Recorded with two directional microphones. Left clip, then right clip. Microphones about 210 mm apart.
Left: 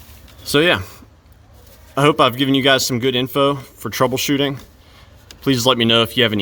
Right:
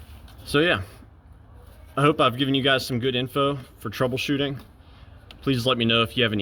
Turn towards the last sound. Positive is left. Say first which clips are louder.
# left 7 dB
turn(degrees=30)  # may be behind; listen again after turning